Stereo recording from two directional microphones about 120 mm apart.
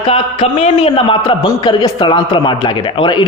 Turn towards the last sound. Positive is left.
turn(degrees=40)  # may be behind; listen again after turning